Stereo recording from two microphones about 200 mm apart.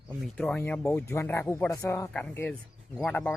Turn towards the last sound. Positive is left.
turn(degrees=5)  # may be behind; listen again after turning